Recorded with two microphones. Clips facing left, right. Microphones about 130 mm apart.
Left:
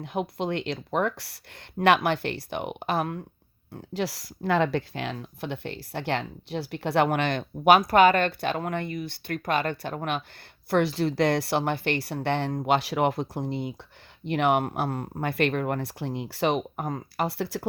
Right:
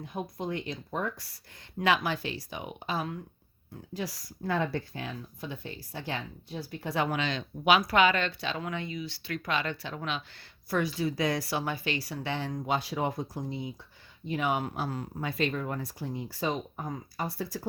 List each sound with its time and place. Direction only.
0.0 s speech: 80° left
1.8 s speech: 65° left (ahead or behind)
3.8 s speech: 75° left (ahead or behind); by 10.2 s 50° left (ahead or behind)
10.7 s speech: 70° left (ahead or behind)